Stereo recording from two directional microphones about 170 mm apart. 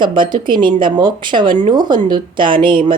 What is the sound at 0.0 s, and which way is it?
Speech, 30° right (ahead or behind).